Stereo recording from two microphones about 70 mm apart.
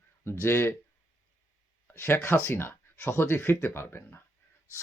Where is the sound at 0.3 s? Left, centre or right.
Left.